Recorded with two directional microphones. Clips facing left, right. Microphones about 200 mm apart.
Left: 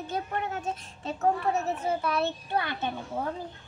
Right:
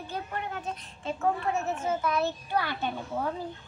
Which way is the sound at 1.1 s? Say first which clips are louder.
Left 2 dB; 40° left (ahead or behind).